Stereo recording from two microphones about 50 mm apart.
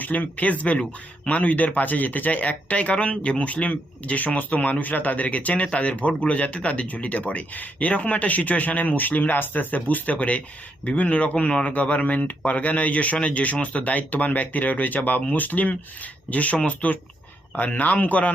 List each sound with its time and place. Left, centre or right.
0.0 s speech: left